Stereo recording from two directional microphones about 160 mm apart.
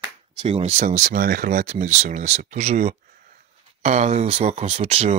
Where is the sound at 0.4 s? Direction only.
35° right (ahead or behind).